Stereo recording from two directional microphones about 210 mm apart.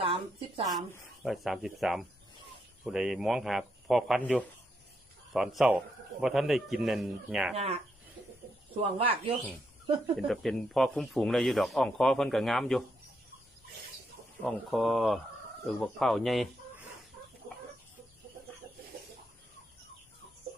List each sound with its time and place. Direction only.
0.0 s speech: 25° right (ahead or behind)
1.2 s speech: centre (ahead or behind)
8.9 s speech: 25° right (ahead or behind)
10.1 s speech: centre (ahead or behind)
14.4 s speech: centre (ahead or behind)